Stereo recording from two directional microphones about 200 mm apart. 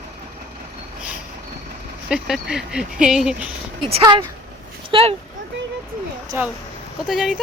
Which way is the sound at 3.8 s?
25° right (ahead or behind).